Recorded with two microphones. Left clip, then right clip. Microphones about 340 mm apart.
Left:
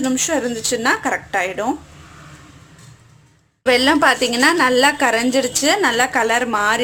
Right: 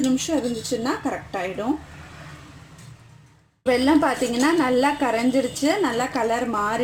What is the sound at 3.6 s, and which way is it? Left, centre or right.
A woman's voice, left.